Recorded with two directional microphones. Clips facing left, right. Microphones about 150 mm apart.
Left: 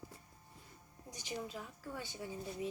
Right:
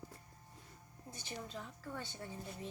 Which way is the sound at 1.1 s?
15° left (ahead or behind).